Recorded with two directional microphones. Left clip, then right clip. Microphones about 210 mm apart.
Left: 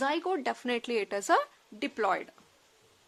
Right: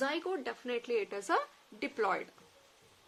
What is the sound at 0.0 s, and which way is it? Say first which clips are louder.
A woman's voice: left 5 dB; 40° left (ahead or behind).